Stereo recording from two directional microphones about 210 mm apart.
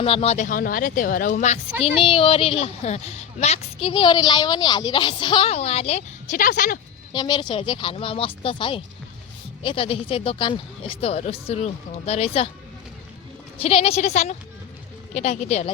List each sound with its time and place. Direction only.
0.0 s speech: 25° left (ahead or behind)
2.0 s a woman's voice: 25° left (ahead or behind)
7.1 s a woman's voice: 20° left (ahead or behind)
13.6 s a woman's voice: 30° left (ahead or behind)